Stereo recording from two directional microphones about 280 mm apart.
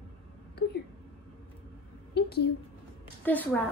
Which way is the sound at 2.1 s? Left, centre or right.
Left.